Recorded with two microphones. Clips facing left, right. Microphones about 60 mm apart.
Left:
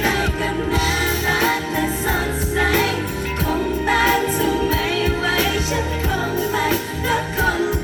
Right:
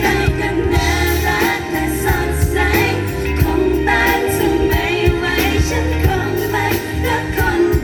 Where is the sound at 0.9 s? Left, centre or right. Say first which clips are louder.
Right 3 dB; right.